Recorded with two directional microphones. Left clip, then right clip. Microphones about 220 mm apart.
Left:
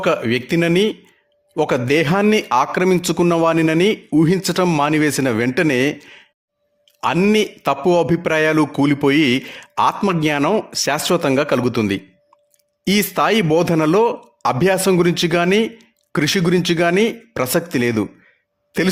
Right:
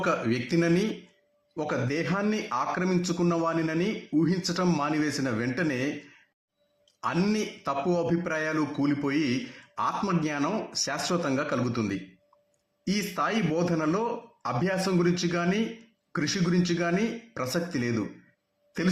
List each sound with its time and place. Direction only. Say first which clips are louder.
0.0 s speech: left 9 dB; 45° left (ahead or behind)